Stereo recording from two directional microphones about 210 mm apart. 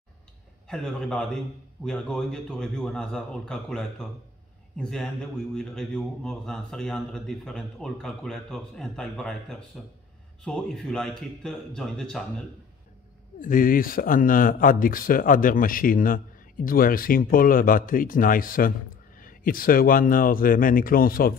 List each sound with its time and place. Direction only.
0.7 s a man's voice: 5° left (ahead or behind)
13.4 s speech: 40° left (ahead or behind)